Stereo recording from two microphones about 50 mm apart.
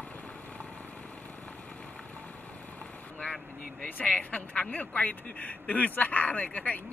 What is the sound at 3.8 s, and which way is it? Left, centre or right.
Speech, left.